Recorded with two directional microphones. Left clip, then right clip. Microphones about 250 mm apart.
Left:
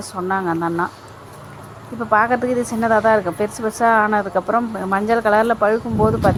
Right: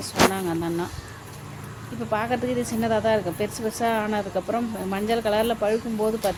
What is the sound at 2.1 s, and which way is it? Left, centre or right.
Speech, centre.